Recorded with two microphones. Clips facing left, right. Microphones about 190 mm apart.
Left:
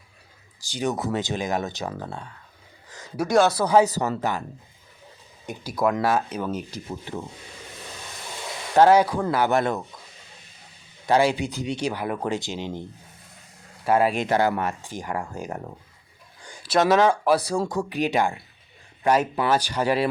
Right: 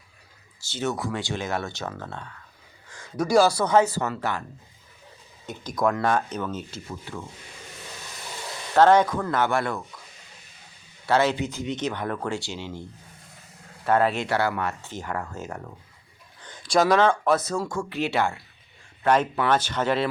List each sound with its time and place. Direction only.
0.6 s speech: 15° left (ahead or behind)
3.2 s speech: centre (ahead or behind); by 4.4 s 15° left (ahead or behind)
5.5 s speech: 5° left (ahead or behind)
8.7 s speech: 10° left (ahead or behind)
9.5 s speech: 20° left (ahead or behind)
11.0 s speech: 15° left (ahead or behind)
13.8 s speech: 10° left (ahead or behind)